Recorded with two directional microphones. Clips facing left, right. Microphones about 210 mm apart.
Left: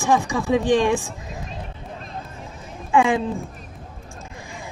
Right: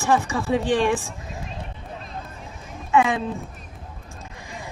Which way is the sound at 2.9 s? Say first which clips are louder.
Left 2 dB; 30° left (ahead or behind).